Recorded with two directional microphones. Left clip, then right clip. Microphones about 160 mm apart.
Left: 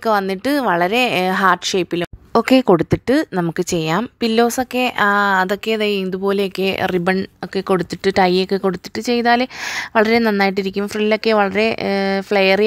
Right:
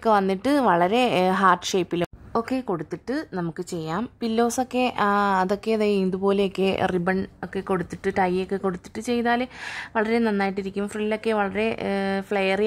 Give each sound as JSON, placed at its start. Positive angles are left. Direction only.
{"t": 0.3, "sound": "speech", "side_deg": 10}
{"t": 2.3, "sound": "speech", "side_deg": 45}
{"t": 7.5, "sound": "speech", "side_deg": 35}